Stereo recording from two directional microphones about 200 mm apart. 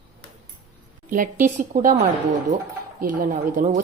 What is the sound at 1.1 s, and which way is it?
Speech, 40° right (ahead or behind).